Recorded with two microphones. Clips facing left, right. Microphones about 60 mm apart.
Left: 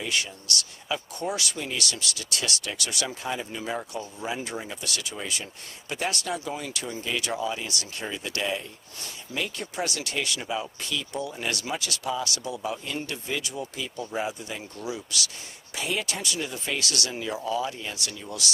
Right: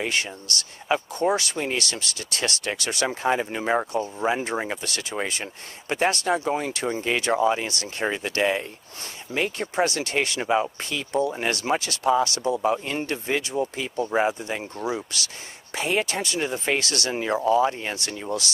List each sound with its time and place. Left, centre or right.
0.0 s speech: right